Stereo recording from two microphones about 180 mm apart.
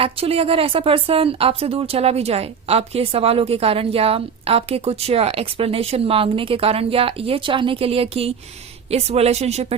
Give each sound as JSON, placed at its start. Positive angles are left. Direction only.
{"t": 0.0, "sound": "speech", "side_deg": -35}